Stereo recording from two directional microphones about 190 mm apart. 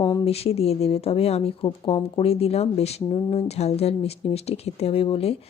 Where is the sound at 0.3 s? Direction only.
30° left (ahead or behind).